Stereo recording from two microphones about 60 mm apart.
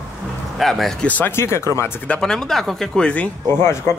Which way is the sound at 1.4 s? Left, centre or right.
Left.